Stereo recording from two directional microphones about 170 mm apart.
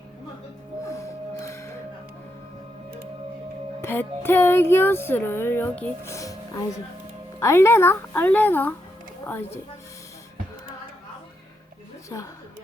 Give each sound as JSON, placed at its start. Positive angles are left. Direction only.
{"t": 0.9, "sound": "music", "side_deg": 15}
{"t": 3.8, "sound": "speech", "side_deg": 15}
{"t": 12.0, "sound": "a woman's voice", "side_deg": 20}